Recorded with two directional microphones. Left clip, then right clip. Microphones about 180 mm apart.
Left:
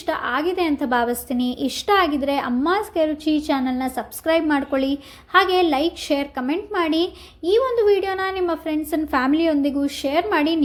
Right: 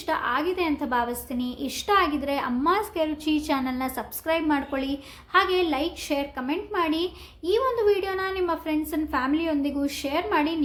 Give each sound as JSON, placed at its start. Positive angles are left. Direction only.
{"t": 0.0, "sound": "a woman's voice", "side_deg": 25}
{"t": 4.3, "sound": "a woman's voice", "side_deg": 30}